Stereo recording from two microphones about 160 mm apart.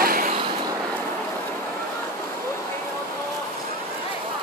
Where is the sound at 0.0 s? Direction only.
65° right (ahead or behind).